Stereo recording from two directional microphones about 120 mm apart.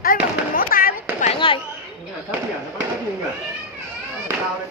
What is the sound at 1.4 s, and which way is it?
Chatter, 45° left (ahead or behind).